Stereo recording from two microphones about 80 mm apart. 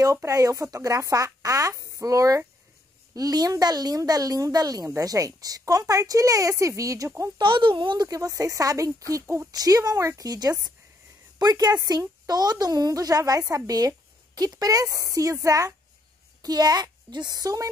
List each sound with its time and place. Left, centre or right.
0.0 s a woman's voice: right
7.3 s speech: right
8.1 s a woman's voice: right
9.5 s a woman's voice: right
16.4 s a woman's voice: right